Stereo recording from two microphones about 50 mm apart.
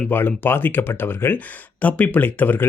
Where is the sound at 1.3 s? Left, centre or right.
Left.